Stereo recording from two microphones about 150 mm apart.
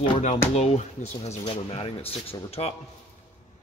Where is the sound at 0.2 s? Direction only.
50° left (ahead or behind).